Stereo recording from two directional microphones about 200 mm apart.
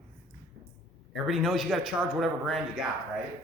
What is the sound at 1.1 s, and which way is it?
Speech, centre (ahead or behind).